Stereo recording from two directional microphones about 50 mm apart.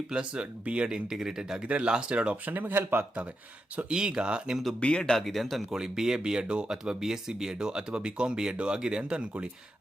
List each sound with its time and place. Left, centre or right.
0.1 s speech: centre
2.5 s speech: right
3.8 s speech: centre
4.8 s speech: left
5.1 s speech: centre
5.7 s speech: centre